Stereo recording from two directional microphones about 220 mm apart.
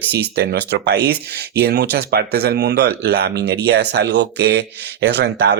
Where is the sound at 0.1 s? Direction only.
50° right (ahead or behind).